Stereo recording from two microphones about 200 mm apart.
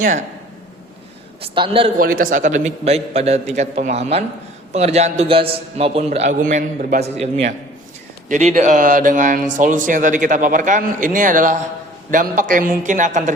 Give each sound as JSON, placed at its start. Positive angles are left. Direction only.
{"t": 0.0, "sound": "speech", "side_deg": -40}
{"t": 1.4, "sound": "a man's voice", "side_deg": -25}
{"t": 2.0, "sound": "speech", "side_deg": -45}